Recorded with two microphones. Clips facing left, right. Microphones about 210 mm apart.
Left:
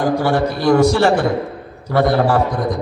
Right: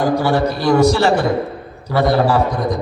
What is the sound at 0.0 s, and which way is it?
A man's voice, 50° left (ahead or behind).